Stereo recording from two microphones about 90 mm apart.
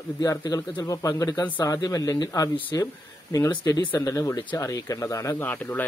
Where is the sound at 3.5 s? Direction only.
45° left (ahead or behind).